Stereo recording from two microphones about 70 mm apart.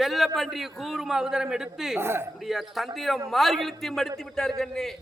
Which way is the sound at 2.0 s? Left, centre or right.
Right.